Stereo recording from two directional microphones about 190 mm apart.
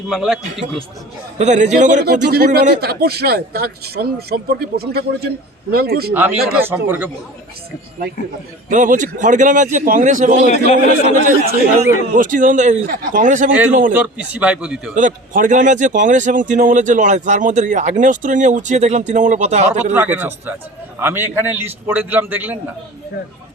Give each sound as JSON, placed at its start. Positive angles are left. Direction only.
{"t": 0.1, "sound": "a man's voice", "side_deg": 0}
{"t": 1.4, "sound": "speech", "side_deg": -40}
{"t": 2.0, "sound": "speech", "side_deg": -55}
{"t": 6.6, "sound": "a man's voice", "side_deg": -10}
{"t": 8.7, "sound": "speech", "side_deg": -40}
{"t": 10.4, "sound": "a man's voice", "side_deg": 35}
{"t": 11.1, "sound": "speech", "side_deg": -45}
{"t": 13.9, "sound": "a man's voice", "side_deg": -10}
{"t": 14.9, "sound": "speech", "side_deg": -45}
{"t": 19.9, "sound": "a man's voice", "side_deg": -10}